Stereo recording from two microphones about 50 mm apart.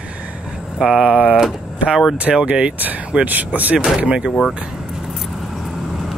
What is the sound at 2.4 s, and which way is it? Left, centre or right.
Speech, centre.